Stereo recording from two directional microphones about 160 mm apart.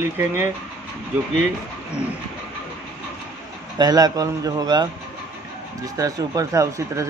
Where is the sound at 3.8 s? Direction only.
25° right (ahead or behind).